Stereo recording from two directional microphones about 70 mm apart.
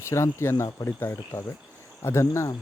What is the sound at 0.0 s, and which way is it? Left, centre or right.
Speech, left.